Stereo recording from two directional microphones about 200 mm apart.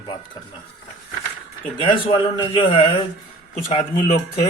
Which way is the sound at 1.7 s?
25° left (ahead or behind).